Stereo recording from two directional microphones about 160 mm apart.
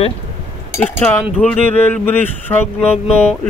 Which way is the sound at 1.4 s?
10° left (ahead or behind).